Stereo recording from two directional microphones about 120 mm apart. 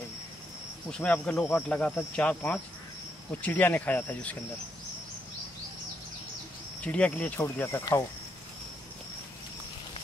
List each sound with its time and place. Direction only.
0.8 s speech: 10° left (ahead or behind)
6.8 s speech: 10° left (ahead or behind)